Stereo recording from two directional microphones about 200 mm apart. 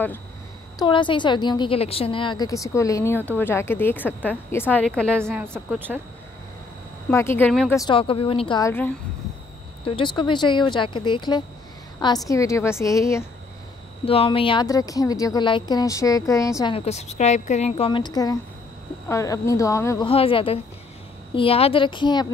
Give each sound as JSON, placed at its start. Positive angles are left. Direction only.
{"t": 0.7, "sound": "a woman's voice", "side_deg": 25}
{"t": 5.3, "sound": "a woman's voice", "side_deg": -10}
{"t": 7.1, "sound": "a woman's voice", "side_deg": 10}
{"t": 7.7, "sound": "speech", "side_deg": 20}
{"t": 9.8, "sound": "a woman's voice", "side_deg": 25}
{"t": 14.0, "sound": "a woman's voice", "side_deg": 30}
{"t": 16.7, "sound": "a woman's voice", "side_deg": 35}
{"t": 20.1, "sound": "speech", "side_deg": 25}